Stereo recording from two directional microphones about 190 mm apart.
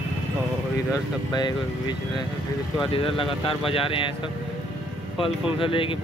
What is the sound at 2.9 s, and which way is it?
Speech, 30° left (ahead or behind).